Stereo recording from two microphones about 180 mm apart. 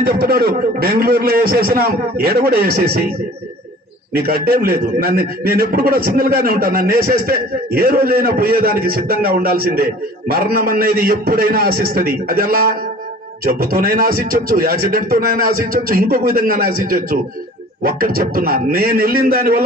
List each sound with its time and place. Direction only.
0.0 s a man's voice: 55° right (ahead or behind)
4.1 s a man's voice: 55° right (ahead or behind)